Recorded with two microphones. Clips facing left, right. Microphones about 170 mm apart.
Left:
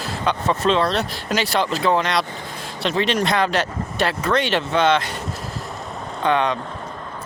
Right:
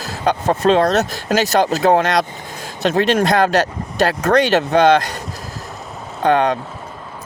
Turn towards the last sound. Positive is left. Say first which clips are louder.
# right 4 dB
turn(degrees=-45)  # may be behind; listen again after turning